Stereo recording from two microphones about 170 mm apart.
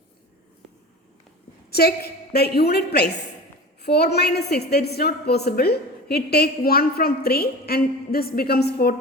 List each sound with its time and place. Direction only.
1.7 s a woman's voice: 70° left (ahead or behind)